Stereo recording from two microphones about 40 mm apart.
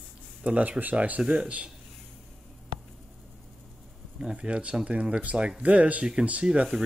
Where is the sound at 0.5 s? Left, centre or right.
Right.